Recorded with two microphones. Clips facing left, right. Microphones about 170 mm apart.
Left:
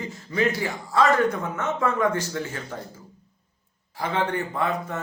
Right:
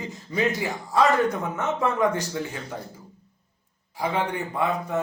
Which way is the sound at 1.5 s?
15° right (ahead or behind).